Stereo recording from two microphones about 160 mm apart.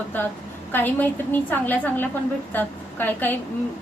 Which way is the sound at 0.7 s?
10° left (ahead or behind).